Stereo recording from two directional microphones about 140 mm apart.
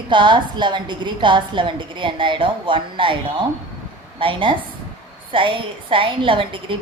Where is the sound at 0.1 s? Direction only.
35° right (ahead or behind).